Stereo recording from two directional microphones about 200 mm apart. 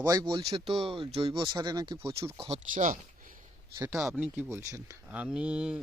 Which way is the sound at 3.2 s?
45° right (ahead or behind).